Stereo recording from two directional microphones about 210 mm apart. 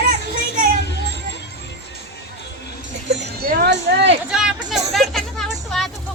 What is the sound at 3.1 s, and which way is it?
Speech, 50° right (ahead or behind).